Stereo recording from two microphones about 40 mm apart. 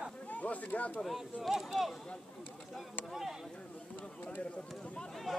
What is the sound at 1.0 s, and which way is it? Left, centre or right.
Speech, centre.